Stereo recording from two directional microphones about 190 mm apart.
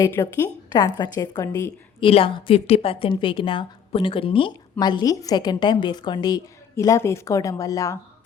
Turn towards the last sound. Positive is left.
turn(degrees=15)  # may be behind; listen again after turning